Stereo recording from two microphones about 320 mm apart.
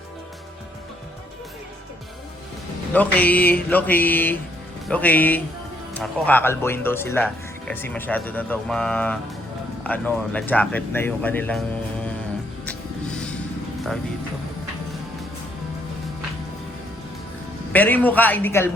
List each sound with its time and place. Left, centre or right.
2.9 s speech: centre
17.7 s speech: centre